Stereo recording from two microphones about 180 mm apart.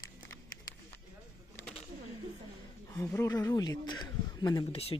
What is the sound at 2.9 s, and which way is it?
Speech, 15° left (ahead or behind).